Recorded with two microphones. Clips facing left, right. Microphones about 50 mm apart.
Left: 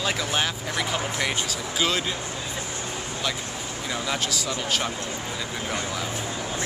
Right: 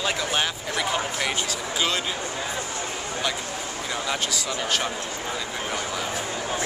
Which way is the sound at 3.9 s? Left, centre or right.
Centre.